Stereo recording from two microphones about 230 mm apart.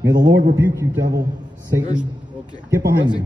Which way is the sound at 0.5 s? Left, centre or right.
Centre.